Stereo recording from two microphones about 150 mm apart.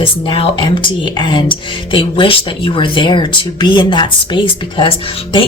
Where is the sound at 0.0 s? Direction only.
35° left (ahead or behind).